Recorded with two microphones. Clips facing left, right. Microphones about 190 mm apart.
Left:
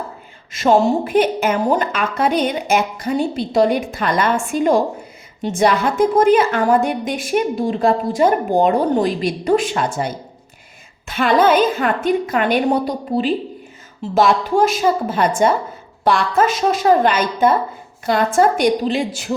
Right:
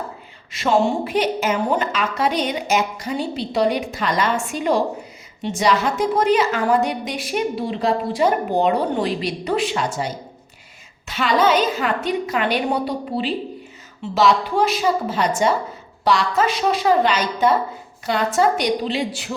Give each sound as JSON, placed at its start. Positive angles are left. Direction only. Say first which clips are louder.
{"t": 0.5, "sound": "a woman's voice", "louder": "left 4 dB", "side_deg": 45}
{"t": 11.1, "sound": "a woman's voice", "louder": "left 4 dB", "side_deg": 50}